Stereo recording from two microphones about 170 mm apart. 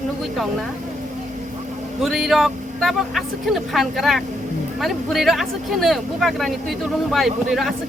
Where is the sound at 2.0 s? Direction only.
Centre (ahead or behind).